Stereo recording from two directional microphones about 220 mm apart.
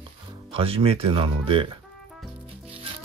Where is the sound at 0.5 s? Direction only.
25° right (ahead or behind).